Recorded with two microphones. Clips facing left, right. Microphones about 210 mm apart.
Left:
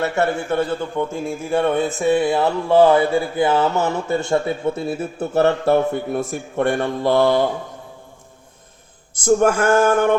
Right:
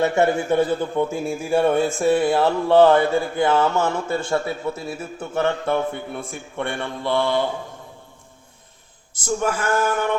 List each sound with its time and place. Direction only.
0.0 s a man's voice: 15° right (ahead or behind); by 7.4 s 40° left (ahead or behind)
9.2 s male singing: 50° left (ahead or behind)